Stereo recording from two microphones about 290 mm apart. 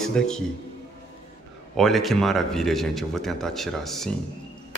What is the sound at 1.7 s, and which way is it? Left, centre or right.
Speech, centre.